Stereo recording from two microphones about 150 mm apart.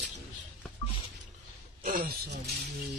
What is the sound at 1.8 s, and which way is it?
Speech, 65° right (ahead or behind).